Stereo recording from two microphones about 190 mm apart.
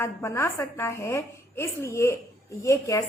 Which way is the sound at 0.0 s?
15° left (ahead or behind).